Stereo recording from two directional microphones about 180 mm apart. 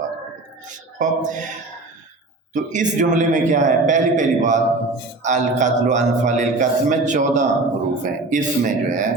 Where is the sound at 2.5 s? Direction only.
45° right (ahead or behind).